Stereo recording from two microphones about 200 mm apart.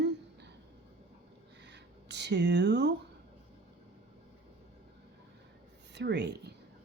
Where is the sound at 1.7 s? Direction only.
60° right (ahead or behind).